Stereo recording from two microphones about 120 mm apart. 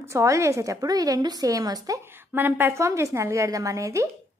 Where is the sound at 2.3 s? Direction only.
15° right (ahead or behind).